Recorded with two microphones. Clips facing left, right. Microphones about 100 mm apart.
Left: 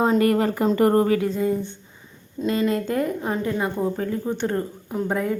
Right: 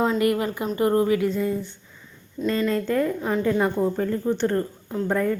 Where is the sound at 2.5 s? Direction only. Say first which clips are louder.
Even; 10° left (ahead or behind).